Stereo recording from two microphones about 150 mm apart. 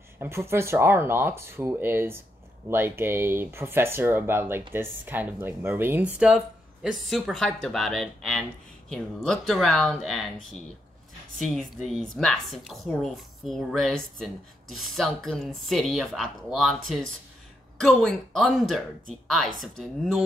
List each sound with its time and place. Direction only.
0.2 s speech: 15° right (ahead or behind); by 10.2 s 5° left (ahead or behind)
11.3 s speech: centre (ahead or behind)